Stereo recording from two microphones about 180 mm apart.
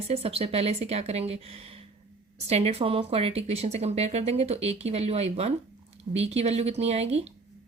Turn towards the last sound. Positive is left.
turn(degrees=-35)  # may be behind; listen again after turning